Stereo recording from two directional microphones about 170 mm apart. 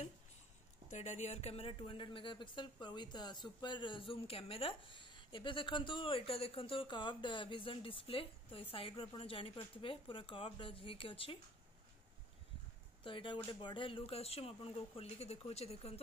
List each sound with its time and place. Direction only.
0.8 s speech: 45° left (ahead or behind)
13.0 s speech: 30° left (ahead or behind)